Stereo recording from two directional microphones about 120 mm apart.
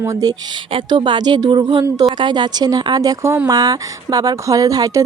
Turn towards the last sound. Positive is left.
turn(degrees=-30)  # may be behind; listen again after turning